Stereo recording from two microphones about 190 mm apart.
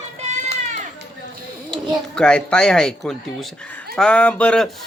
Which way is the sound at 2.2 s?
5° left (ahead or behind).